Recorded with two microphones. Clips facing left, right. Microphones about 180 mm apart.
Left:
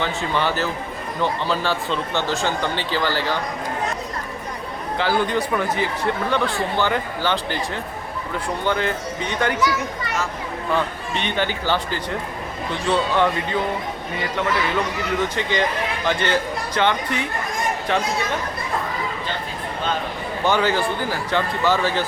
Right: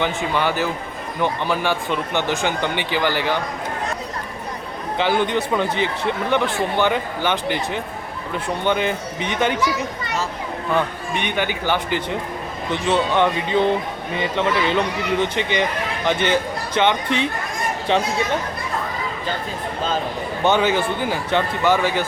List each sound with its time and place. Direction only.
0.0 s speech: 15° right (ahead or behind)
4.9 s speech: 20° right (ahead or behind)
11.1 s speech: 15° right (ahead or behind)
20.4 s speech: 20° right (ahead or behind)